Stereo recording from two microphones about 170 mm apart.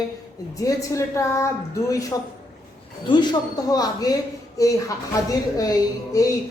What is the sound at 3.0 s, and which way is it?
Speech, 25° left (ahead or behind).